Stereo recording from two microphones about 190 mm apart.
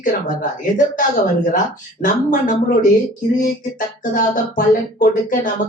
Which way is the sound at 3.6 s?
45° left (ahead or behind).